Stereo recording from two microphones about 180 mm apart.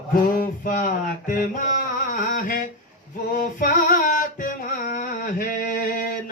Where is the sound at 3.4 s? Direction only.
50° left (ahead or behind).